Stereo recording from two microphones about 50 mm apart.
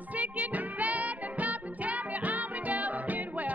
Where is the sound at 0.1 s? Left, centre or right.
Right.